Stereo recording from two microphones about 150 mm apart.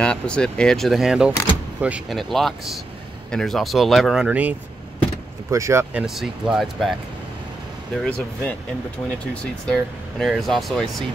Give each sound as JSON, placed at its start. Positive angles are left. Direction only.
{"t": 0.0, "sound": "speech", "side_deg": 5}
{"t": 6.0, "sound": "speech", "side_deg": 0}
{"t": 8.0, "sound": "speech", "side_deg": 5}